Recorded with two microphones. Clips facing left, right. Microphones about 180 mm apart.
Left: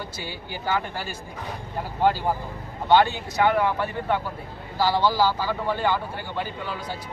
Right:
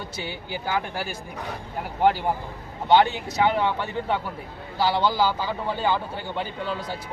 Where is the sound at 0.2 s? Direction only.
20° right (ahead or behind).